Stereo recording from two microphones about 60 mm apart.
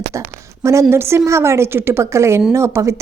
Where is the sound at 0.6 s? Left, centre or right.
Right.